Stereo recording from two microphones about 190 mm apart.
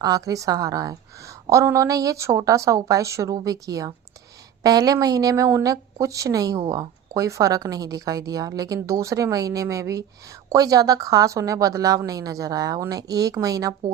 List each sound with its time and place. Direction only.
0.0 s a woman's voice: 20° right (ahead or behind)